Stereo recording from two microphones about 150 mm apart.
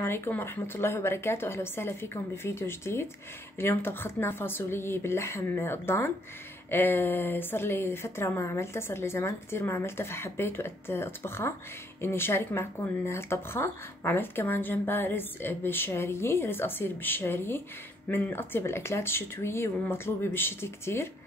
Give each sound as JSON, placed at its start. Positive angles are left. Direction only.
{"t": 0.0, "sound": "speech", "side_deg": 15}